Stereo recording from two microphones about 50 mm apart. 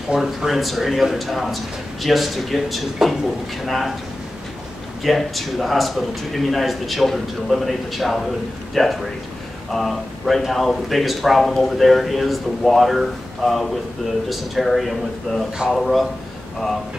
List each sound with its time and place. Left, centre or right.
0.1 s speech: centre
5.0 s speech: centre